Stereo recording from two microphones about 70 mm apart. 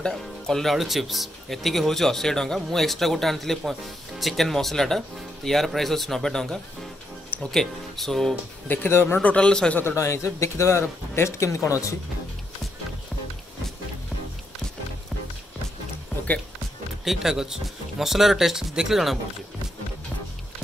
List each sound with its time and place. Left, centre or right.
0.0 s speech: centre
8.6 s speech: left
9.2 s a man's voice: centre
9.8 s a man's voice: left
17.0 s speech: centre